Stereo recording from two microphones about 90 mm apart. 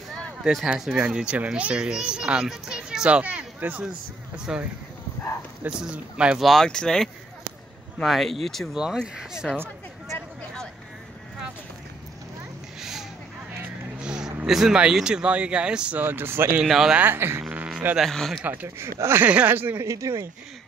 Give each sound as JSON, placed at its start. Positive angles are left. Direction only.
{"t": 0.4, "sound": "a child's voice", "side_deg": 0}
{"t": 5.7, "sound": "a child's voice", "side_deg": -10}
{"t": 6.4, "sound": "a child's voice", "side_deg": 5}
{"t": 14.0, "sound": "speech", "side_deg": -5}
{"t": 16.0, "sound": "speech", "side_deg": -25}
{"t": 16.6, "sound": "speech", "side_deg": -5}
{"t": 17.0, "sound": "speech", "side_deg": -25}
{"t": 17.9, "sound": "speech", "side_deg": 5}
{"t": 18.4, "sound": "speech", "side_deg": -20}
{"t": 19.2, "sound": "speech", "side_deg": -20}
{"t": 19.9, "sound": "speech", "side_deg": -35}